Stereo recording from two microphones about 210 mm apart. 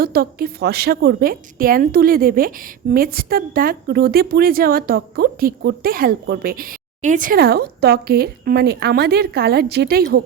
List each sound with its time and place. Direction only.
0.0 s a woman's voice: 45° right (ahead or behind)